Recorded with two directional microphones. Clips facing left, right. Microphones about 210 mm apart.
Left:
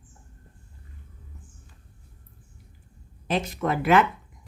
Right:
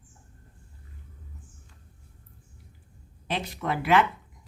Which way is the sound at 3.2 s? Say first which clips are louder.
Left 5 dB; 45° left (ahead or behind).